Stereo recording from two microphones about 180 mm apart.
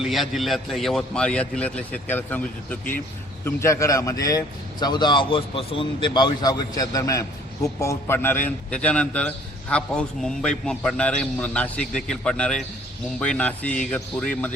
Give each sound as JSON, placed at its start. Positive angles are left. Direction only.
{"t": 0.0, "sound": "a man's voice", "side_deg": 0}